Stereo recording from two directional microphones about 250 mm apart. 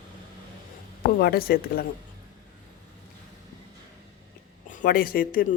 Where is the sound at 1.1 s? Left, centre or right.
Left.